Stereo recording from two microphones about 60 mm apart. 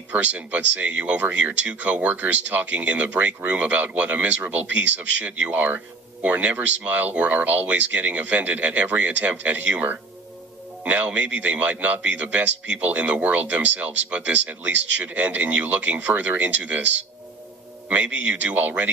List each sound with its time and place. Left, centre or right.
0.1 s a man's voice: right